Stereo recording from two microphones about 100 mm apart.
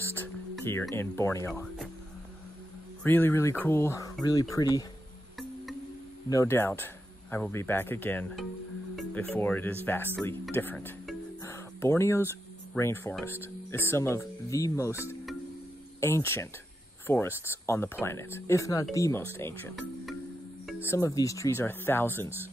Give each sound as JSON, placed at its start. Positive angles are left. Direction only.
{"t": 0.0, "sound": "music", "side_deg": 20}
{"t": 1.5, "sound": "speech", "side_deg": 0}
{"t": 3.0, "sound": "speech", "side_deg": 20}
{"t": 6.4, "sound": "speech", "side_deg": 25}
{"t": 11.4, "sound": "a sound", "side_deg": 30}
{"t": 13.2, "sound": "speech", "side_deg": 25}
{"t": 16.0, "sound": "speech", "side_deg": 25}
{"t": 20.8, "sound": "speech", "side_deg": 30}